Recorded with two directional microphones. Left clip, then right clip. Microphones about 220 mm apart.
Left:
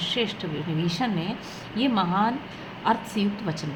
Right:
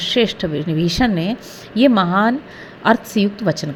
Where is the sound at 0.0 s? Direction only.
35° right (ahead or behind).